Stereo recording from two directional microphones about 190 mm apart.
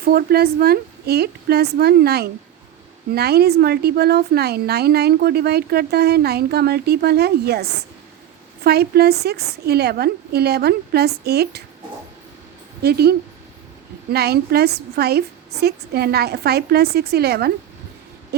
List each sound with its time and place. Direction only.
0.0 s speech: 50° right (ahead or behind)
12.8 s speech: 55° right (ahead or behind)